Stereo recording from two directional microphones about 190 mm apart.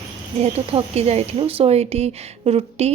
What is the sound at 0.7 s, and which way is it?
Speech, 30° right (ahead or behind).